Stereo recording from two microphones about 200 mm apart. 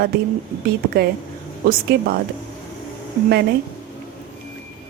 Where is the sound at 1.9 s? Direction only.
50° right (ahead or behind).